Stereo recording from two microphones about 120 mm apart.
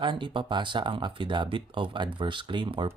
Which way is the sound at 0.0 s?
45° right (ahead or behind).